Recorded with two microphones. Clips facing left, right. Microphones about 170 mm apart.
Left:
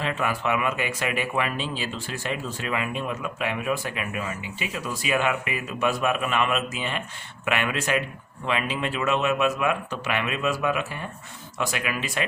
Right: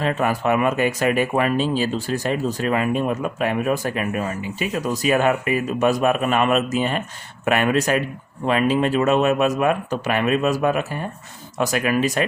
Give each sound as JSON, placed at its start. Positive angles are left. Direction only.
{"t": 0.0, "sound": "speech", "side_deg": -45}